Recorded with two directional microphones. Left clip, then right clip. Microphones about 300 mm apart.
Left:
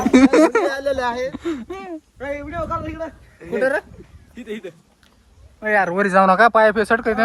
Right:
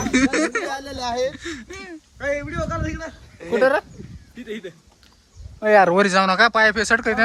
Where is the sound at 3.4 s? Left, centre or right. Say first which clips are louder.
Right 2 dB; right.